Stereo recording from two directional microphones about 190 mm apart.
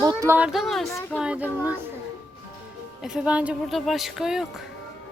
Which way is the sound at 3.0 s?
5° right (ahead or behind).